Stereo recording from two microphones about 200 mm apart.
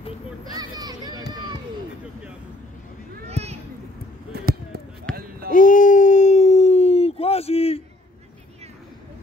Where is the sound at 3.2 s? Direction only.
30° right (ahead or behind).